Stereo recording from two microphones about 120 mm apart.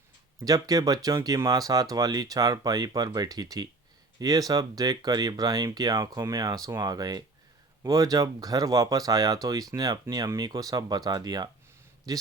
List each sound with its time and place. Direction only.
0.3 s speech: 30° right (ahead or behind)